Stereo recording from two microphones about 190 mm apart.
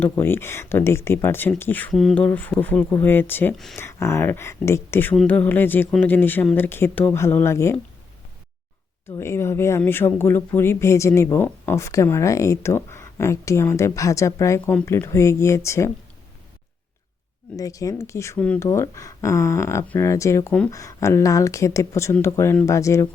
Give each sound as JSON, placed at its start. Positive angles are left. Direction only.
{"t": 0.0, "sound": "speech", "side_deg": 10}
{"t": 9.0, "sound": "speech", "side_deg": 15}
{"t": 17.6, "sound": "speech", "side_deg": 20}